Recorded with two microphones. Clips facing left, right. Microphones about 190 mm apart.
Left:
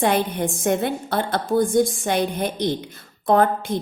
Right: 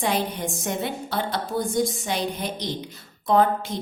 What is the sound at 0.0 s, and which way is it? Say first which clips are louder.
A woman's voice: left 5 dB; 55° left (ahead or behind).